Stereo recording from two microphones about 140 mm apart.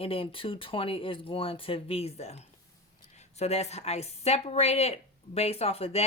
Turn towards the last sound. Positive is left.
turn(degrees=45)  # may be behind; listen again after turning